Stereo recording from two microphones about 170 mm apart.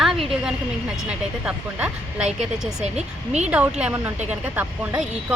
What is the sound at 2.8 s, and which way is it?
Speech, 40° right (ahead or behind).